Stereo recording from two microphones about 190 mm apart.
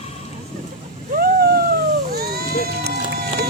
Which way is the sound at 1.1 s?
50° right (ahead or behind).